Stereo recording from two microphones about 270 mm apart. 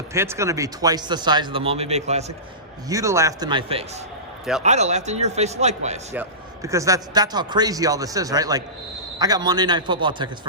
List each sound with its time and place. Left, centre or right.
0.1 s a man's voice: centre
2.9 s a man's voice: centre
6.1 s a man's voice: centre